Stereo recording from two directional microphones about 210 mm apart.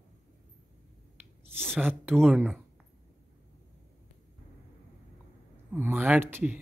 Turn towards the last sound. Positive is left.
turn(degrees=-10)  # may be behind; listen again after turning